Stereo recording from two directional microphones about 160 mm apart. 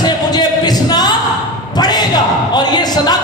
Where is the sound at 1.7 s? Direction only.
25° left (ahead or behind).